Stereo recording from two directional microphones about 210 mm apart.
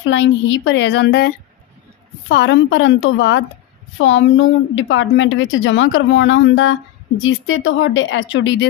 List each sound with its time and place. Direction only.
0.0 s a woman's voice: 60° left (ahead or behind)